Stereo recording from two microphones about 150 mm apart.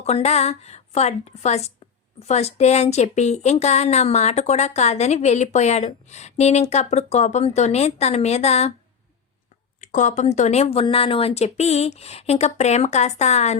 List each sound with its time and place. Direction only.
0.0 s speech: 45° left (ahead or behind)
9.8 s speech: 55° left (ahead or behind)